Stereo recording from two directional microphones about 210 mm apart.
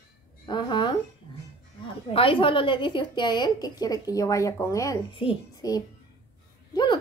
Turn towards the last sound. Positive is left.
turn(degrees=20)  # may be behind; listen again after turning